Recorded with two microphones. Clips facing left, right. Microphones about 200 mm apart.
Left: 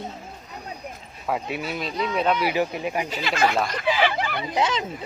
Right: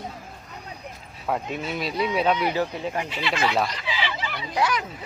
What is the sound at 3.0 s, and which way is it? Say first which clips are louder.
Speech: left 2 dB; 40° left (ahead or behind).